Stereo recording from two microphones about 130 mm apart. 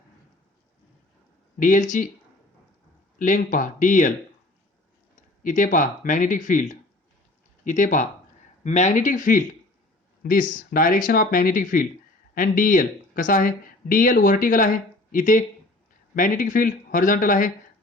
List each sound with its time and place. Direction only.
1.5 s speech: 85° left
3.2 s speech: 85° left
5.4 s speech: 85° left
8.6 s speech: 65° left (ahead or behind); by 17.5 s 90° left